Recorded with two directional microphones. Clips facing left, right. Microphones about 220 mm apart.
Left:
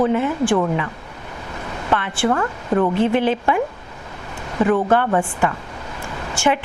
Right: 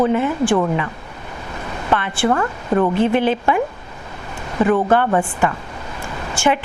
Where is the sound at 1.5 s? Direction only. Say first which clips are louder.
Right 1 dB; 20° right (ahead or behind).